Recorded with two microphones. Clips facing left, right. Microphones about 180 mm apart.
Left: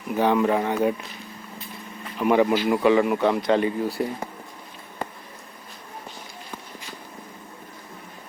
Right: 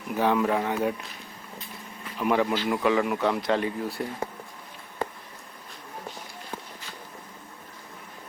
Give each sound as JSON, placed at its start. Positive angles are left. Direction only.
{"t": 0.1, "sound": "speech", "side_deg": 0}
{"t": 2.1, "sound": "speech", "side_deg": 5}